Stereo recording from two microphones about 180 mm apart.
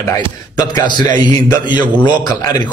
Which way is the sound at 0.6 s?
25° left (ahead or behind).